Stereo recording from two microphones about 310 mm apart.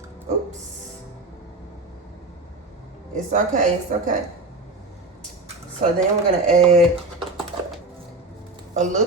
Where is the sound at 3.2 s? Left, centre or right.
Right.